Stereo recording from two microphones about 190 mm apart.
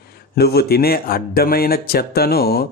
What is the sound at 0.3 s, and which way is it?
Speech, 55° left (ahead or behind).